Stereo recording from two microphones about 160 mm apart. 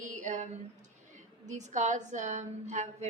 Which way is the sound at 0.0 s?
50° right (ahead or behind).